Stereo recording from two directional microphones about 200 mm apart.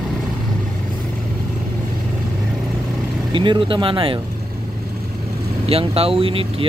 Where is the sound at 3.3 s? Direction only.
25° right (ahead or behind).